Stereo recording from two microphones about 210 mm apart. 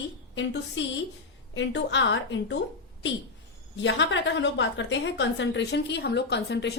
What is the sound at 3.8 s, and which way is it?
A woman's voice, 60° left (ahead or behind).